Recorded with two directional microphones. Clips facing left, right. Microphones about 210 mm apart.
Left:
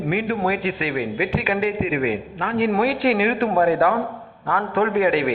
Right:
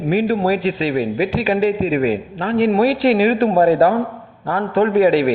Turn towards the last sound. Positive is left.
turn(degrees=-35)  # may be behind; listen again after turning